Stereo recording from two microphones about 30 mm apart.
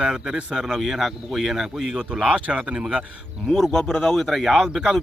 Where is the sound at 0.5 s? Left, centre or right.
Centre.